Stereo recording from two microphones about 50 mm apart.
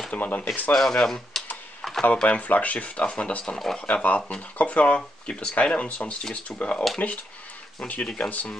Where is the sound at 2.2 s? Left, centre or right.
Left.